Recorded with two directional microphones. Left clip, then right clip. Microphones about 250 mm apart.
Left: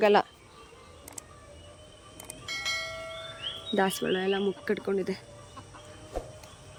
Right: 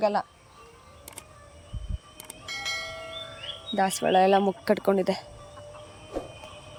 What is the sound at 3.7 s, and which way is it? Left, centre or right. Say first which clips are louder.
Speech: right 3 dB; centre.